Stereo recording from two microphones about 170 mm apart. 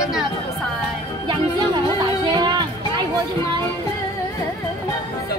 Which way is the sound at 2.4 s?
25° right (ahead or behind).